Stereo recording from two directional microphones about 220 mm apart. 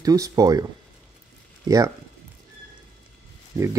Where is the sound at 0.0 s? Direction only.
15° right (ahead or behind).